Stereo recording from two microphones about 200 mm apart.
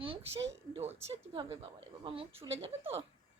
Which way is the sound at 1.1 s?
30° right (ahead or behind).